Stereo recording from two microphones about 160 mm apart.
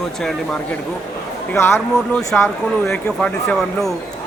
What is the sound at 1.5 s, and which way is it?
Speech, 15° left (ahead or behind).